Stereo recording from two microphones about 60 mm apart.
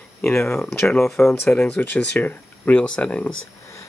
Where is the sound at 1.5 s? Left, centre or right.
Left.